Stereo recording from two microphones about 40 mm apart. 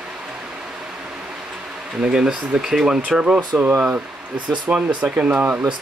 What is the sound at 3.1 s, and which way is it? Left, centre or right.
Speech, right.